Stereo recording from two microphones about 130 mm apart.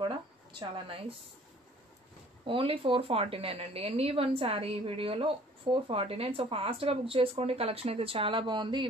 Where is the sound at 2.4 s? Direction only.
45° right (ahead or behind).